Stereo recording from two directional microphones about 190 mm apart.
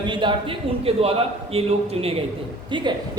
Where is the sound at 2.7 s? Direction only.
25° right (ahead or behind).